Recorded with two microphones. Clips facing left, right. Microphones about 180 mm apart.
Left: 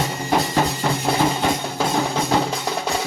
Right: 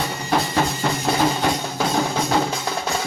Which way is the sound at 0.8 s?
5° left (ahead or behind).